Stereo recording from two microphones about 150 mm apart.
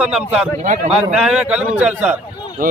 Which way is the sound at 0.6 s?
55° right (ahead or behind).